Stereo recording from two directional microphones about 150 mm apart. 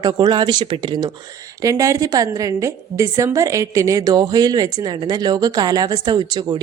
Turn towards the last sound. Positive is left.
turn(degrees=-30)  # may be behind; listen again after turning